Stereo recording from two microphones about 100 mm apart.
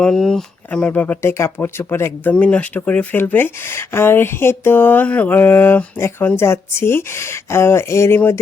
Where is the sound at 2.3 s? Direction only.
10° left (ahead or behind).